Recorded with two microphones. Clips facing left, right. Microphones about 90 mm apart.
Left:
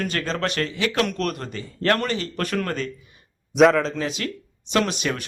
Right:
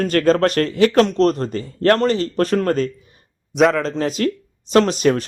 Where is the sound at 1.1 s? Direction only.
30° right (ahead or behind).